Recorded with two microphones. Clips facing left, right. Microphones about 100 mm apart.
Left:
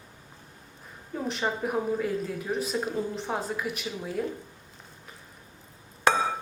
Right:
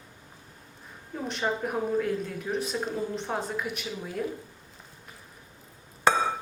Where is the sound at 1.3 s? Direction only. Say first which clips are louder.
Even; centre (ahead or behind).